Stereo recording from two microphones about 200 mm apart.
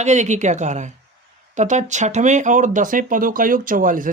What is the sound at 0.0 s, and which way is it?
Speech, 35° right (ahead or behind).